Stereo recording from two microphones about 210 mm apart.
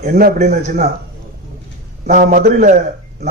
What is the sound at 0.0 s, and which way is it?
Speech, 35° right (ahead or behind).